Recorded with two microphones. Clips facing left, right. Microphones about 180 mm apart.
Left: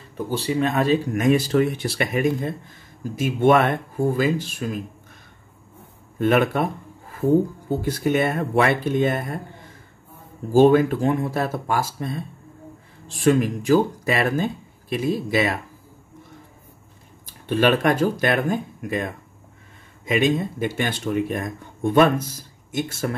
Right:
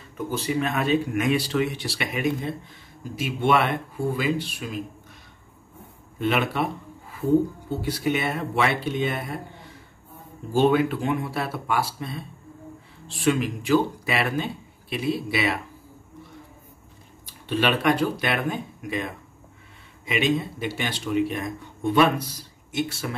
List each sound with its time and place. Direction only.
0.2 s speech: 30° left (ahead or behind)
6.1 s a sound: 45° left (ahead or behind)
7.8 s speech: 45° left (ahead or behind)
10.5 s speech: 40° left (ahead or behind)
17.3 s speech: 45° left (ahead or behind)